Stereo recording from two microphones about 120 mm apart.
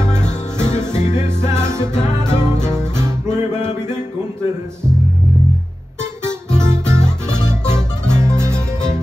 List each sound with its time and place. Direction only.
0.7 s music: 20° right (ahead or behind)
6.5 s music: 20° right (ahead or behind)